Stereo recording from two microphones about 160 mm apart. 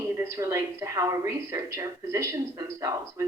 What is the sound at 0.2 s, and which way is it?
Speech, 20° right (ahead or behind).